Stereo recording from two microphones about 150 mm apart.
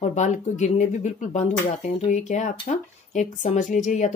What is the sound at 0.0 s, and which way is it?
Speech, 50° left (ahead or behind).